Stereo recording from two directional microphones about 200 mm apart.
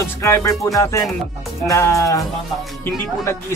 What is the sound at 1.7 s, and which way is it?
Speech, 15° left (ahead or behind).